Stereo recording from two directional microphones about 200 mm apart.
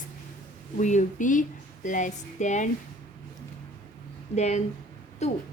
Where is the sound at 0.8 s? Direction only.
35° left (ahead or behind).